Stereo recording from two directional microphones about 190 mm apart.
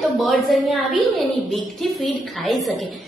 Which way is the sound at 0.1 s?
Centre (ahead or behind).